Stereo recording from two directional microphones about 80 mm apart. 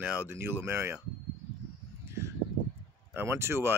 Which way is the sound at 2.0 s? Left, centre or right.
Right.